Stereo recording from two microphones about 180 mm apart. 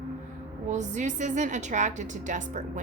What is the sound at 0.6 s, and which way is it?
A woman's voice, 40° right (ahead or behind).